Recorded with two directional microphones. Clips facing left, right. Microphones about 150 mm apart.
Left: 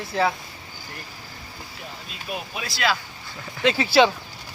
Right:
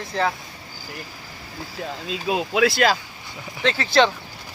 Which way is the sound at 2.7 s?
40° right (ahead or behind).